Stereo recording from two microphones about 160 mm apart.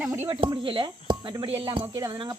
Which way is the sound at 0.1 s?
15° right (ahead or behind).